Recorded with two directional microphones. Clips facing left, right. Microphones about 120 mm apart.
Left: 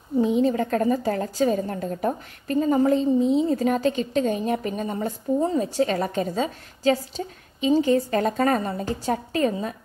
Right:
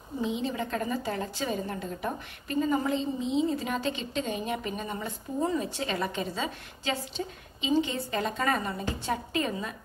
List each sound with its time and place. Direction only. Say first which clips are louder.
0.2 s a woman's voice: left 10 dB; 45° left (ahead or behind)